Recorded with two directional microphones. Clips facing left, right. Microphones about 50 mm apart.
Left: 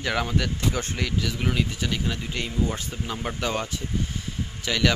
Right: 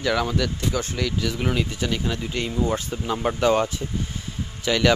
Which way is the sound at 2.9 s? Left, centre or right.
Centre.